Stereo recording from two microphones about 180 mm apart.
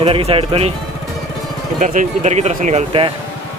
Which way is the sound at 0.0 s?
30° right (ahead or behind).